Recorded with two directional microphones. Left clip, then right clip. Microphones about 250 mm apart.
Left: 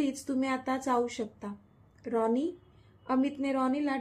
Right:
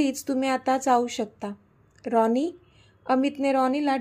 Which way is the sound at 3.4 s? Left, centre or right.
Right.